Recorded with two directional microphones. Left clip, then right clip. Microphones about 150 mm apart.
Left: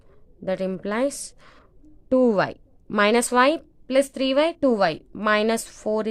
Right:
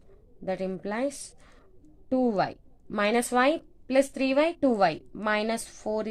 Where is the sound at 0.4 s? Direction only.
45° left (ahead or behind).